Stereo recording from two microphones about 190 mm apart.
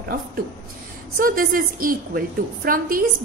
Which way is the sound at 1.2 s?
50° right (ahead or behind).